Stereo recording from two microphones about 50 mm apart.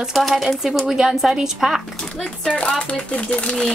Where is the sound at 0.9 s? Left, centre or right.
Centre.